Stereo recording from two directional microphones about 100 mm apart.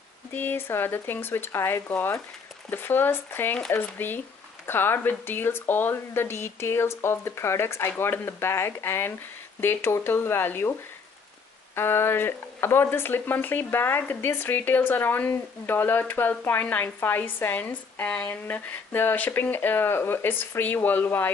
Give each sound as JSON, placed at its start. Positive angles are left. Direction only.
{"t": 0.3, "sound": "speech", "side_deg": 20}
{"t": 11.7, "sound": "speech", "side_deg": 25}